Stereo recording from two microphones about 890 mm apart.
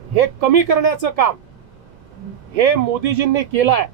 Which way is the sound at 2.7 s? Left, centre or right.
Right.